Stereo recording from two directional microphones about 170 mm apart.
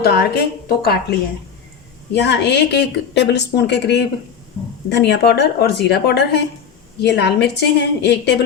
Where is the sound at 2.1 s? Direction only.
90° left.